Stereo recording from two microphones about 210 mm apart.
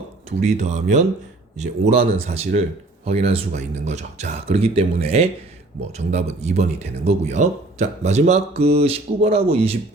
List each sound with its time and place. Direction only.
0.3 s speech: 30° right (ahead or behind)